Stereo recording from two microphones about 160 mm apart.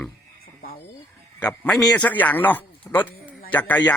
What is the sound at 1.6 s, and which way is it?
A man's voice, 5° left (ahead or behind).